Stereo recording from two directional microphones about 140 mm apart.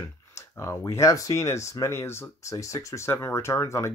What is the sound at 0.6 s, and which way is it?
Speech, 20° left (ahead or behind).